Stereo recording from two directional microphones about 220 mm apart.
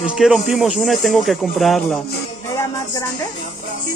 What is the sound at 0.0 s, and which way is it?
Speech, 5° right (ahead or behind).